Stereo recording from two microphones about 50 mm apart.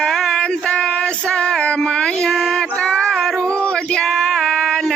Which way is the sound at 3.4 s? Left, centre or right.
Left.